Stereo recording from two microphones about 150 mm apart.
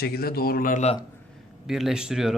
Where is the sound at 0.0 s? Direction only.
90° left; by 0.9 s 60° left (ahead or behind).